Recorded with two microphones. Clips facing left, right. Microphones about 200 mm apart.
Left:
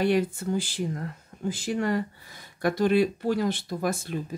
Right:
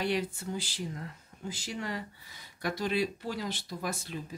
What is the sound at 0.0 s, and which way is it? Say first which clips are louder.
Speech: left 8 dB; 50° left (ahead or behind).